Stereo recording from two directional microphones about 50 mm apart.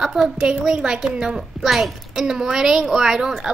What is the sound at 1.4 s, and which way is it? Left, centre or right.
Speech, centre.